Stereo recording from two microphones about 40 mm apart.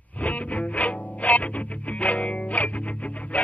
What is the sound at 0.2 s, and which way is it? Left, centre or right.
Music, left.